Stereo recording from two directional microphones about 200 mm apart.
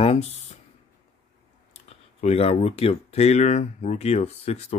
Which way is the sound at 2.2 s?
30° left (ahead or behind).